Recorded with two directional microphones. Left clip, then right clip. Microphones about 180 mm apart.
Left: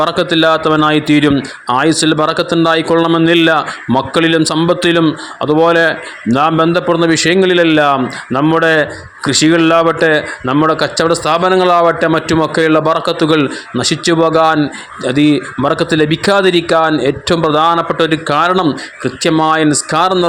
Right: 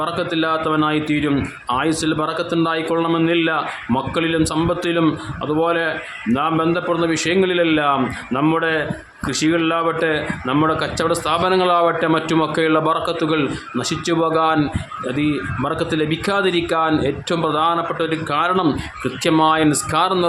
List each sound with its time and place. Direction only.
0.0 s a man's voice: 35° left (ahead or behind)